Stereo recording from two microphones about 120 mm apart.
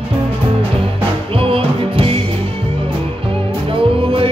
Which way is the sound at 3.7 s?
50° right (ahead or behind).